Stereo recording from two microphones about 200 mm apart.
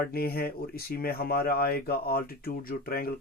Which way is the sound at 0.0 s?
50° left (ahead or behind).